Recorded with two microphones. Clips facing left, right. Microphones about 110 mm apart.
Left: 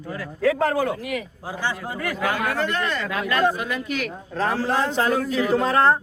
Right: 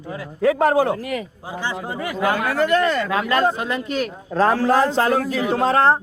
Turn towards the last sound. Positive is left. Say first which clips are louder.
# right 2 dB
turn(degrees=-30)  # may be behind; listen again after turning